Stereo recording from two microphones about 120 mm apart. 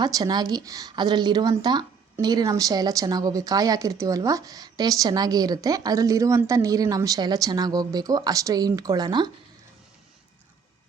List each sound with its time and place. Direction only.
0.0 s speech: 35° right (ahead or behind)